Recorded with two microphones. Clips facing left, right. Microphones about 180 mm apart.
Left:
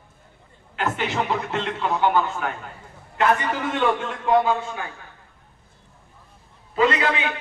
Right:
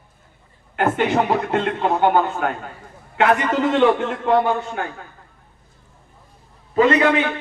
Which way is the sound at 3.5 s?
70° right (ahead or behind).